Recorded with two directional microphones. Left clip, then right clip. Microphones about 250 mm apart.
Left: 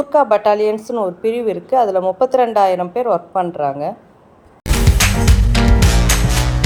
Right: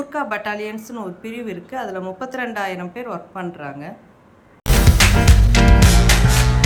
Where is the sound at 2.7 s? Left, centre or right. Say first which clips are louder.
Left 12 dB; left.